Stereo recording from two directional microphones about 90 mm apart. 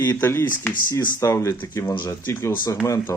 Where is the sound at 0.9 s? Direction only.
35° left (ahead or behind).